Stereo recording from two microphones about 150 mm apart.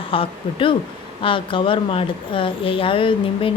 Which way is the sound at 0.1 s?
35° left (ahead or behind).